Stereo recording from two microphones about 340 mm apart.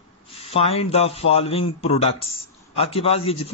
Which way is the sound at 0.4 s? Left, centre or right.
Centre.